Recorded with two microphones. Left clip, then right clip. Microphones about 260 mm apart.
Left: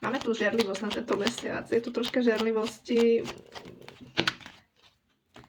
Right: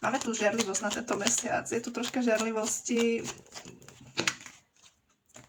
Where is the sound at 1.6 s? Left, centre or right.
Centre.